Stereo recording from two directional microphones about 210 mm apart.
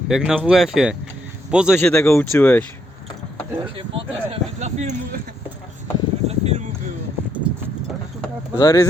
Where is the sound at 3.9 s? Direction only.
30° right (ahead or behind).